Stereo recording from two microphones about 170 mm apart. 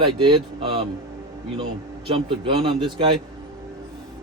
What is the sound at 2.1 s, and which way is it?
Speech, 30° right (ahead or behind).